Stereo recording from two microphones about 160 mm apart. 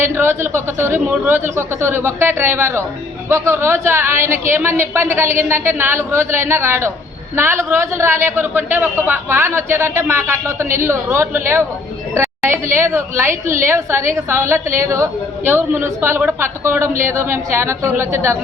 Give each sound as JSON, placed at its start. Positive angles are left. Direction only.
{"t": 0.0, "sound": "a woman's voice", "side_deg": -15}